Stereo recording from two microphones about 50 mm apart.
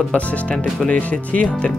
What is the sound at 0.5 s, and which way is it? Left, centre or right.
Speech, centre.